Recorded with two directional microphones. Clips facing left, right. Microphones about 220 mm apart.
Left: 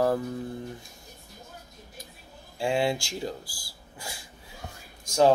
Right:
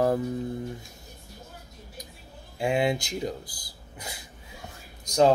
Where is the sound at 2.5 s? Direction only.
20° right (ahead or behind).